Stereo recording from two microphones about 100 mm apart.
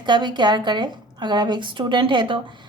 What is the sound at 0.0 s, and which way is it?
A woman's voice, 50° right (ahead or behind).